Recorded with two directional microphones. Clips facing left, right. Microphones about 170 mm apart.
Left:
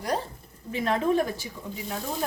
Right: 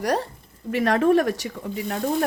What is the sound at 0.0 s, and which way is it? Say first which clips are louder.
Speech: right 5 dB; 70° right (ahead or behind).